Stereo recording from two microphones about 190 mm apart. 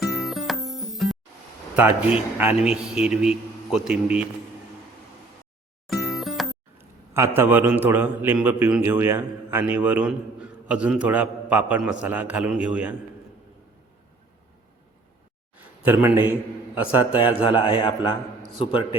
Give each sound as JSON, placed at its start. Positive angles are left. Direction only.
{"t": 0.0, "sound": "music", "side_deg": 0}
{"t": 1.7, "sound": "a man's voice", "side_deg": -5}
{"t": 5.9, "sound": "music", "side_deg": 0}
{"t": 6.7, "sound": "a man's voice", "side_deg": -15}
{"t": 15.8, "sound": "a man's voice", "side_deg": -10}
{"t": 17.2, "sound": "a man's voice", "side_deg": 25}